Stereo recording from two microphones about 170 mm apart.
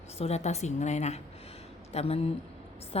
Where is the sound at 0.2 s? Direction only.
40° left (ahead or behind).